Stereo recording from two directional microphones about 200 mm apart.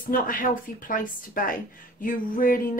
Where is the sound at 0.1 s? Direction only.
45° left (ahead or behind).